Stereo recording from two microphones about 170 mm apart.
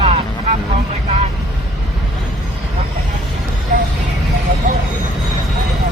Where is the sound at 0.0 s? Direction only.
40° right (ahead or behind).